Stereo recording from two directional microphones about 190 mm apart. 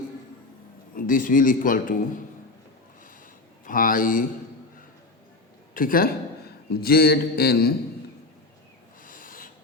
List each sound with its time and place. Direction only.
0.9 s a man's voice: 45° left (ahead or behind)
3.7 s a man's voice: 45° left (ahead or behind)
5.7 s a woman's voice: 50° left (ahead or behind)
9.0 s rub: 45° left (ahead or behind)